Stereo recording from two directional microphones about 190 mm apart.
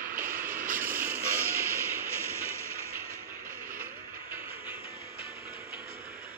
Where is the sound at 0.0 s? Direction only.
45° right (ahead or behind).